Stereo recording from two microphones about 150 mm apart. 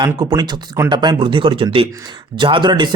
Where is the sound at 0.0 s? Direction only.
30° right (ahead or behind).